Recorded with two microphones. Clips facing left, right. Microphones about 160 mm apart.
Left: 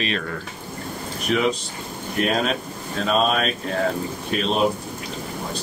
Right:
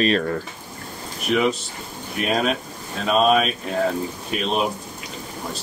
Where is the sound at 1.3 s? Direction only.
Centre (ahead or behind).